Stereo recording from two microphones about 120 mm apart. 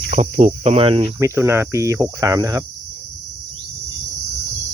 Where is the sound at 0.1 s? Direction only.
75° right (ahead or behind).